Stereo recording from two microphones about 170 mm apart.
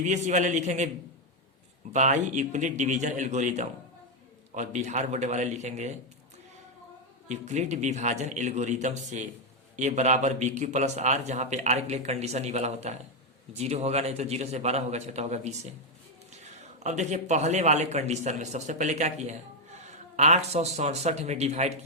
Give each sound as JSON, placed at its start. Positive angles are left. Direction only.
{"t": 0.0, "sound": "a man's voice", "side_deg": -45}
{"t": 1.9, "sound": "a man's voice", "side_deg": -45}
{"t": 7.3, "sound": "a man's voice", "side_deg": -45}